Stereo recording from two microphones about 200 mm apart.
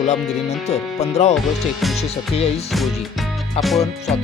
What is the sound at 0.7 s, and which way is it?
Speech, 35° left (ahead or behind).